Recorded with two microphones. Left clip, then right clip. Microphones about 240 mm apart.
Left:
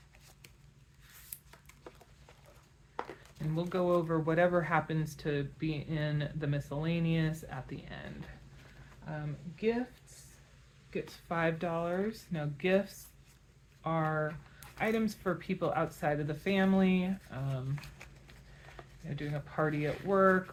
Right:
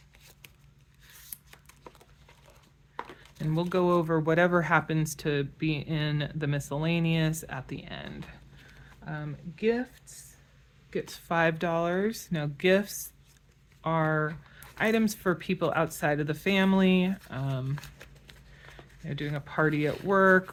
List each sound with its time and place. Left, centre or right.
3.7 s speech: right
10.9 s speech: right
19.0 s speech: right